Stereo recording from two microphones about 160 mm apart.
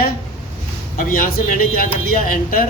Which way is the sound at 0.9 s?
60° left (ahead or behind).